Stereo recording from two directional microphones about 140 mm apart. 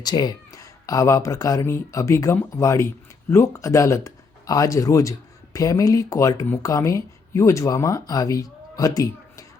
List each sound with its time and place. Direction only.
0.0 s speech: 30° left (ahead or behind)